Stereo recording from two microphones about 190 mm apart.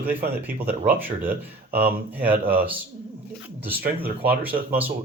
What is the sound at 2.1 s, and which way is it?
Speech, 10° right (ahead or behind).